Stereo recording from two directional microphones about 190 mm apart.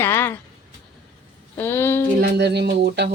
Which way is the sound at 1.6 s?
10° left (ahead or behind).